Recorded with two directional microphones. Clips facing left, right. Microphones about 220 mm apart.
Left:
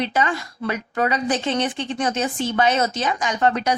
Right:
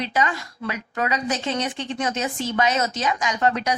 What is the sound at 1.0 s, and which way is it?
A woman's voice, 30° left (ahead or behind).